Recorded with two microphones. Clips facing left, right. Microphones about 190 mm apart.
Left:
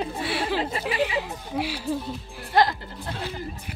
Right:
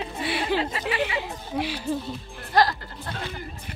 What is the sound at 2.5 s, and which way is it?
Speech, 20° left (ahead or behind).